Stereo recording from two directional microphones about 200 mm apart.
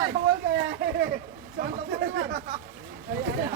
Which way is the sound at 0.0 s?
55° right (ahead or behind).